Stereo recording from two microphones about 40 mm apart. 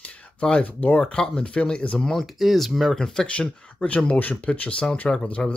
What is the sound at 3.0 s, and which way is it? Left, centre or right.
Speech, centre.